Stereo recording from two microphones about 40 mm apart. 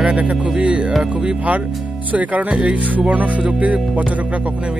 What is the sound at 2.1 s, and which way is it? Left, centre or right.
Music, right.